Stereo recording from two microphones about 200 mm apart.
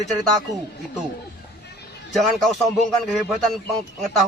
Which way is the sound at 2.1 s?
Centre (ahead or behind).